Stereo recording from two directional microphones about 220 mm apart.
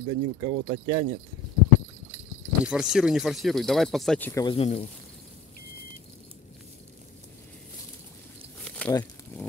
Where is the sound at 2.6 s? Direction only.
5° right (ahead or behind).